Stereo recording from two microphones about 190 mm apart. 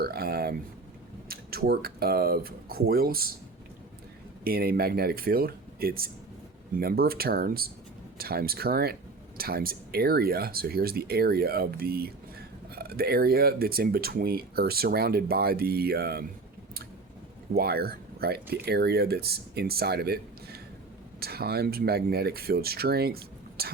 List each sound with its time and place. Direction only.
0.0 s speech: 55° right (ahead or behind)
4.4 s speech: 50° right (ahead or behind)
17.5 s speech: 55° right (ahead or behind)